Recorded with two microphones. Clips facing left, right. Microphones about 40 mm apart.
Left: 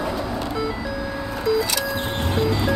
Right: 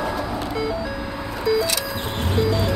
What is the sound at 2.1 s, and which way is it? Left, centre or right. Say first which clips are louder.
Music: right 2 dB; centre.